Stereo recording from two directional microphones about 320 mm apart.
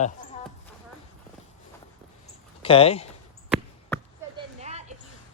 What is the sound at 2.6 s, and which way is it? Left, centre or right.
Speech, centre.